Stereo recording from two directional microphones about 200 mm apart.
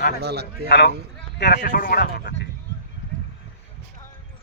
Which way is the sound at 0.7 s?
55° left (ahead or behind).